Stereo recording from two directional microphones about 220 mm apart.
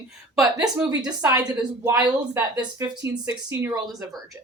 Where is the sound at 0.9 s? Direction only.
15° right (ahead or behind).